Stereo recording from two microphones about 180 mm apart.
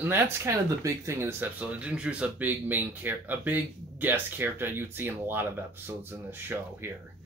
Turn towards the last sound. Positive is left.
turn(degrees=-10)  # may be behind; listen again after turning